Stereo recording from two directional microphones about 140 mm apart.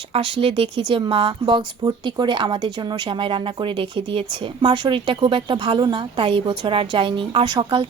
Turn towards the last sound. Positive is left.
turn(degrees=-35)  # may be behind; listen again after turning